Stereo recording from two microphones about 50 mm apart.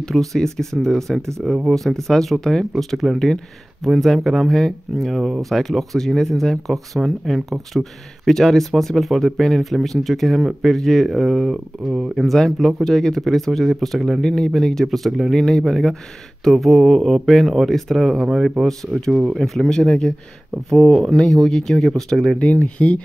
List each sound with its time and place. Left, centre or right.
0.0 s speech: centre
14.2 s speech: centre
20.7 s speech: centre
22.4 s speech: left